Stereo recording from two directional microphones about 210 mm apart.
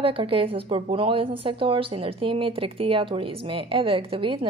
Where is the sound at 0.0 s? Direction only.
25° right (ahead or behind).